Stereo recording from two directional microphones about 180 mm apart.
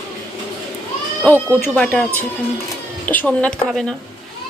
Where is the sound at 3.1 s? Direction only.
10° left (ahead or behind).